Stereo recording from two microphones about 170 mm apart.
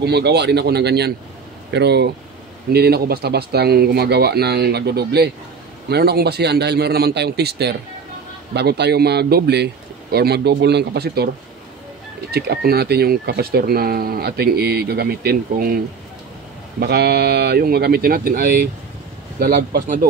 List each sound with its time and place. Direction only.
0.0 s speech: 75° right (ahead or behind)
2.7 s speech: 70° right (ahead or behind)
12.3 s speech: 70° right (ahead or behind)
16.8 s speech: 70° right (ahead or behind)